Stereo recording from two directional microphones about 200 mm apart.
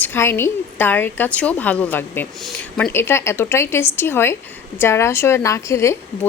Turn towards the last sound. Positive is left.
turn(degrees=15)  # may be behind; listen again after turning